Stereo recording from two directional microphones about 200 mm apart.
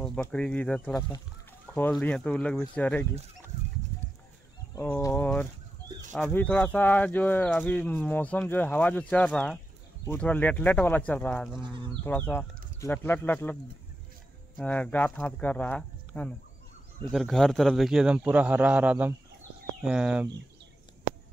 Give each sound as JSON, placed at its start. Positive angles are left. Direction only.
{"t": 0.0, "sound": "a man's voice", "side_deg": 5}
{"t": 4.7, "sound": "speech", "side_deg": 5}
{"t": 11.6, "sound": "speech", "side_deg": -25}
{"t": 12.0, "sound": "speech", "side_deg": 10}
{"t": 14.6, "sound": "a man's voice", "side_deg": 5}